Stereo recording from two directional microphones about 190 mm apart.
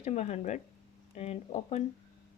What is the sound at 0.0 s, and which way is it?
Speech, 35° left (ahead or behind).